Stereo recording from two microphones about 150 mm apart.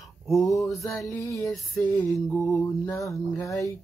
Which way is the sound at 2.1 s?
Centre (ahead or behind).